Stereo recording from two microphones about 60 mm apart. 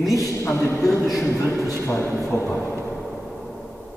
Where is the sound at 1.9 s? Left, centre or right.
Left.